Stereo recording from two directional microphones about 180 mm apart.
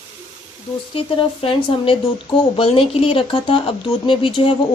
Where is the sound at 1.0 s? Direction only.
30° left (ahead or behind).